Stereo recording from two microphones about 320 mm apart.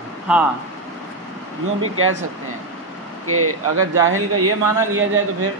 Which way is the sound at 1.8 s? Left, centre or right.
Right.